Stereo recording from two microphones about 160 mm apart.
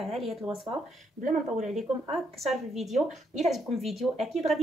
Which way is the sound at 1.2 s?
45° right (ahead or behind).